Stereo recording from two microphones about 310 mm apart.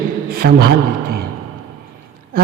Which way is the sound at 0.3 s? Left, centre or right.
Right.